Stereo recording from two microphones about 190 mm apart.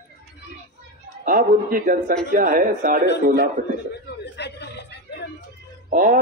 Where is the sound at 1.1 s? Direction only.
45° right (ahead or behind).